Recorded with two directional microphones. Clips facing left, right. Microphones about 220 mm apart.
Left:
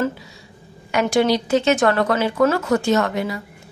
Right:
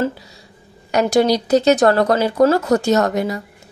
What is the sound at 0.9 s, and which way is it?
A woman's voice, 40° right (ahead or behind).